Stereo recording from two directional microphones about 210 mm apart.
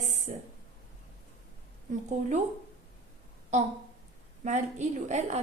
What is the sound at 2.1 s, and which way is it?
Speech, 35° right (ahead or behind).